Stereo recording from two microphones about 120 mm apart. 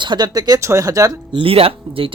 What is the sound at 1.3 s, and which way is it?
Speech, 50° right (ahead or behind).